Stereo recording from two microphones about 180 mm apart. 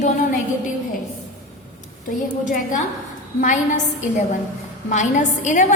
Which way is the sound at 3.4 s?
45° left (ahead or behind).